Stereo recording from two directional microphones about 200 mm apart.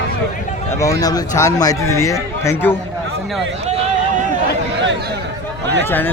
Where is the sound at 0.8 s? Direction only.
15° left (ahead or behind).